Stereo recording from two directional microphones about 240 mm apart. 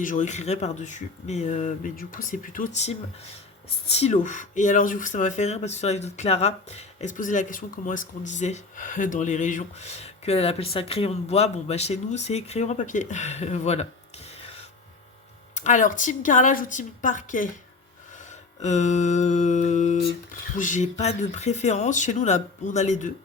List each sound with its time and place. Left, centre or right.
0.0 s speech: left
15.5 s speech: left
18.6 s speech: left